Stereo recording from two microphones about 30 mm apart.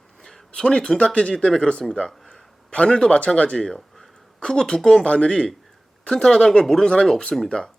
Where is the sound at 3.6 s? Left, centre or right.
Centre.